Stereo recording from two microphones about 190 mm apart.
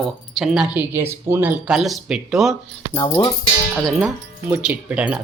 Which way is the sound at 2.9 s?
20° left (ahead or behind).